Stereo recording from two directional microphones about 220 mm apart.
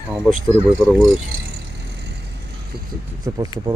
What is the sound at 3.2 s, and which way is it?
Speech, 15° right (ahead or behind).